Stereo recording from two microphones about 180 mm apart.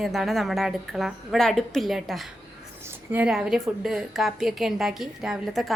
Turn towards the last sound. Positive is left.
turn(degrees=0)  # may be behind; listen again after turning